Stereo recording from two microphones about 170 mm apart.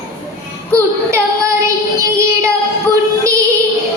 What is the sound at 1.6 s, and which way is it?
Child singing, 15° right (ahead or behind).